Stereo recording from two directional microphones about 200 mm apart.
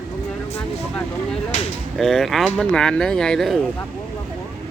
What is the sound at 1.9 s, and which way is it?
Speech, centre (ahead or behind).